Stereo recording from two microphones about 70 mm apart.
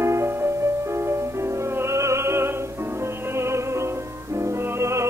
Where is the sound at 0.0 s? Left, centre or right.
Right.